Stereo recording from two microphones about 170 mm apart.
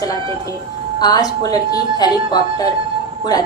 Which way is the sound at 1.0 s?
20° left (ahead or behind).